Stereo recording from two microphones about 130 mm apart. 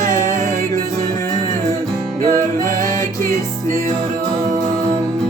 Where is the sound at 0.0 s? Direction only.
25° left (ahead or behind).